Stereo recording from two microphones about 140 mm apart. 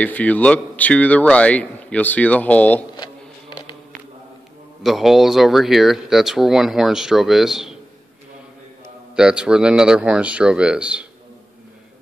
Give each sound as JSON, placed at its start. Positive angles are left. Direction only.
{"t": 0.0, "sound": "a man's voice", "side_deg": 10}
{"t": 3.0, "sound": "a sound", "side_deg": 35}
{"t": 4.8, "sound": "speech", "side_deg": 0}
{"t": 9.1, "sound": "speech", "side_deg": -5}